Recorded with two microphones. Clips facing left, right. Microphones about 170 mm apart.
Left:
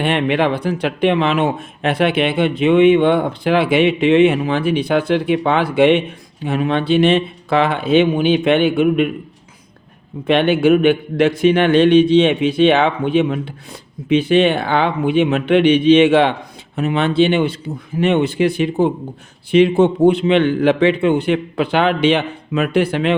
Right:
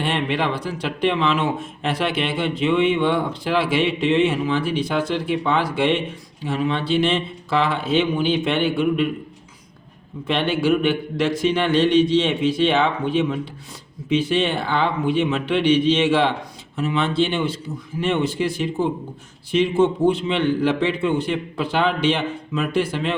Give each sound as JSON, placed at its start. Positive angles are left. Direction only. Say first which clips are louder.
{"t": 0.0, "sound": "speech", "louder": "left 6 dB", "side_deg": 60}
{"t": 10.2, "sound": "speech", "louder": "left 7 dB", "side_deg": 60}